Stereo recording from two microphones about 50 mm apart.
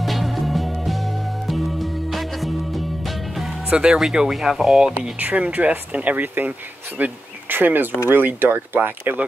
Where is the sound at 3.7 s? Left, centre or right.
Centre.